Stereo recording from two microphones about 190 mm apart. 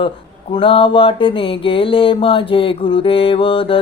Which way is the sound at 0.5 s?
30° left (ahead or behind).